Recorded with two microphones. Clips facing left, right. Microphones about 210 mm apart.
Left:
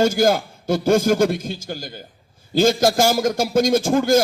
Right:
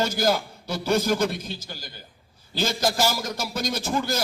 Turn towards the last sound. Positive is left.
turn(degrees=50)  # may be behind; listen again after turning